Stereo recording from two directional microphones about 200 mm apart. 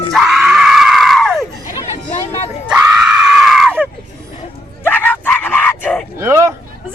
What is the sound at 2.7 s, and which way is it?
Screaming, 5° right (ahead or behind).